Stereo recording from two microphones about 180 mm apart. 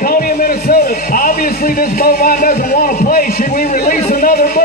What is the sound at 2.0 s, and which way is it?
Speech, 55° left (ahead or behind).